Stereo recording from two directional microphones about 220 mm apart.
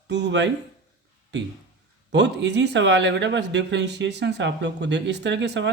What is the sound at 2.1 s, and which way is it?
Speech, 50° right (ahead or behind).